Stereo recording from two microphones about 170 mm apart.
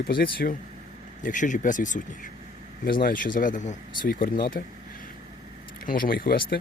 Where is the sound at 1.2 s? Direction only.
50° left (ahead or behind).